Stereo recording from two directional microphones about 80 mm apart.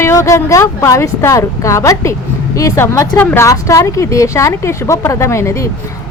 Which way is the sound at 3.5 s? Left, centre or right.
Left.